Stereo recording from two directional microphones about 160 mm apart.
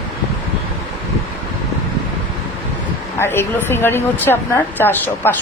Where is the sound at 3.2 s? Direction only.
15° left (ahead or behind).